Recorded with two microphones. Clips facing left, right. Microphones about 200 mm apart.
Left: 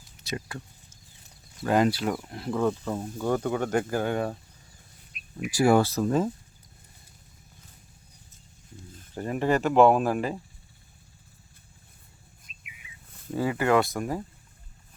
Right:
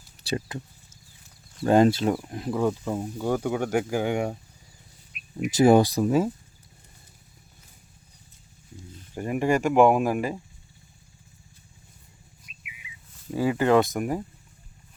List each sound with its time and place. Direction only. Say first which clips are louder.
0.2 s a sound: right 5 dB; 30° right (ahead or behind)
1.6 s speech: right 4 dB; 30° right (ahead or behind); by 4.4 s 15° right (ahead or behind)
5.5 s speech: right 4 dB; 20° right (ahead or behind)
9.1 s speech: right 1 dB; 10° right (ahead or behind)
13.3 s speech: right 3 dB; 15° right (ahead or behind)